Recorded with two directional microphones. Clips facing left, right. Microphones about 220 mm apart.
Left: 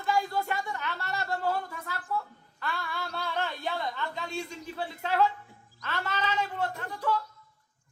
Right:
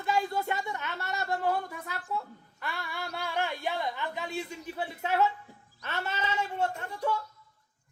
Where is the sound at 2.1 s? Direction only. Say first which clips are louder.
Left 1 dB; 20° right (ahead or behind).